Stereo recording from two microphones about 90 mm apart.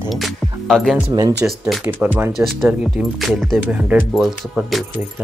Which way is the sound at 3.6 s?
20° right (ahead or behind).